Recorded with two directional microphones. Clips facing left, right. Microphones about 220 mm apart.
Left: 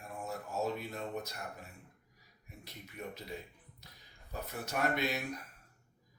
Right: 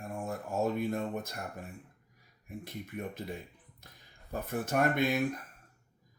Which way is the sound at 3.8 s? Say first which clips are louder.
Right 3 dB; 50° right (ahead or behind).